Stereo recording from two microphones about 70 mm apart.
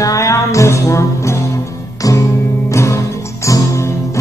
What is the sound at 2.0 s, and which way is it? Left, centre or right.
Music, left.